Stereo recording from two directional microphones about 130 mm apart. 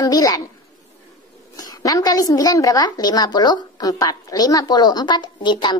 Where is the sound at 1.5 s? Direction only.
30° left (ahead or behind).